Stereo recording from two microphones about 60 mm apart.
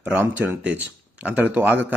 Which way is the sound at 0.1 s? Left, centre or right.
Right.